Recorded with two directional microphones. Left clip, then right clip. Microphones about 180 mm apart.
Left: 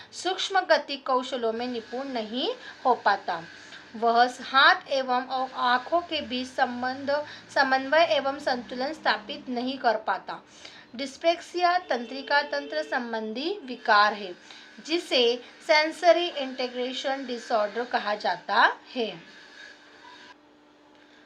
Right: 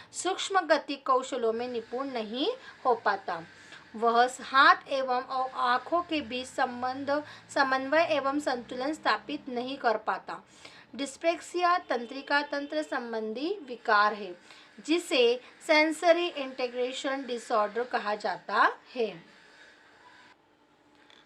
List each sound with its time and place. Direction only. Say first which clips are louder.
0.2 s a woman's voice: left 2 dB; 40° right (ahead or behind)